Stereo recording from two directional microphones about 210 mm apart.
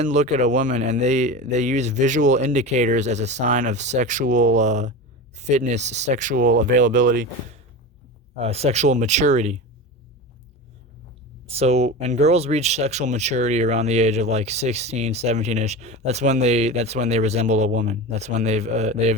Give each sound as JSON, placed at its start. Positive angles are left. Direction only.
{"t": 0.0, "sound": "speech", "side_deg": -35}
{"t": 8.4, "sound": "speech", "side_deg": -30}
{"t": 11.5, "sound": "speech", "side_deg": -30}